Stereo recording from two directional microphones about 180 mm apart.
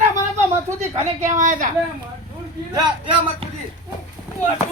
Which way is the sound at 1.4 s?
45° right (ahead or behind).